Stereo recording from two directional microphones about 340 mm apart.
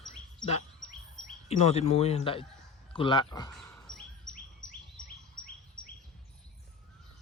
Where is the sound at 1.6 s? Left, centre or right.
Centre.